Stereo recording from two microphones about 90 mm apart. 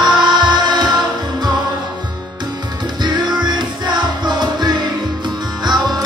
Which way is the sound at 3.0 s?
55° right (ahead or behind).